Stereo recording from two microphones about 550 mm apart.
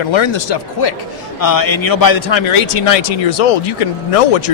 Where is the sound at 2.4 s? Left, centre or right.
Left.